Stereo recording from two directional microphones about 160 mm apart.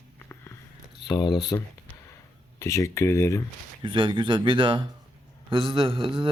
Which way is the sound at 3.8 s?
30° right (ahead or behind).